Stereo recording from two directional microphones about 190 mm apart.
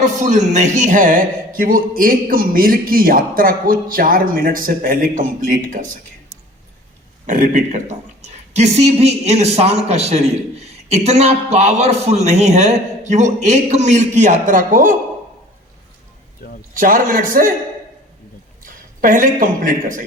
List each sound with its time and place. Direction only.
0.0 s speech: 40° right (ahead or behind)
7.3 s speech: 40° right (ahead or behind)
16.4 s a sound: 50° left (ahead or behind)
16.7 s speech: 45° right (ahead or behind)
18.6 s a man's voice: 45° right (ahead or behind)